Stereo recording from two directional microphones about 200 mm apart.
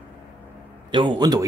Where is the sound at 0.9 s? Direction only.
25° right (ahead or behind).